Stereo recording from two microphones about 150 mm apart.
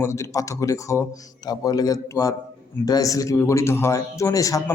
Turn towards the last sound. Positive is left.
turn(degrees=20)  # may be behind; listen again after turning